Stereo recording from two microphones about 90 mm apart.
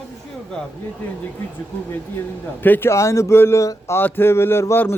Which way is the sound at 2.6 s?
20° left (ahead or behind).